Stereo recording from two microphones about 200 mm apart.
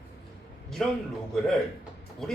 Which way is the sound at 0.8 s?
Centre (ahead or behind).